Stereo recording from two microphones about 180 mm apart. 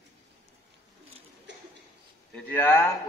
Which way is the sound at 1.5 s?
80° right.